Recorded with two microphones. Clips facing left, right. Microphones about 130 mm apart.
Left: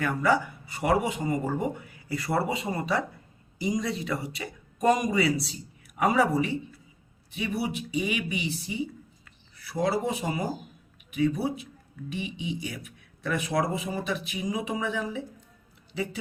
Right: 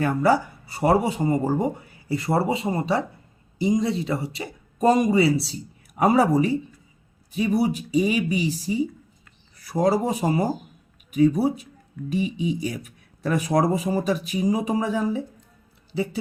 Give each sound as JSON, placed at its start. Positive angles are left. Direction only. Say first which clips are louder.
{"t": 0.0, "sound": "speech", "louder": "right 5 dB", "side_deg": -30}